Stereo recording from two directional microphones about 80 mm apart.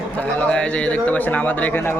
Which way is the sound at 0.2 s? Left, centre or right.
Centre.